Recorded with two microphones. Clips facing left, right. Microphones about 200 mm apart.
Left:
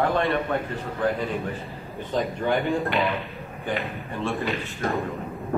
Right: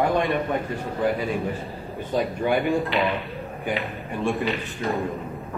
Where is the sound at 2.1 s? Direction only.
15° right (ahead or behind).